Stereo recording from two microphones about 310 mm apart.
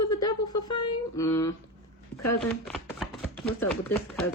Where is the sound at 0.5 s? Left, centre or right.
Left.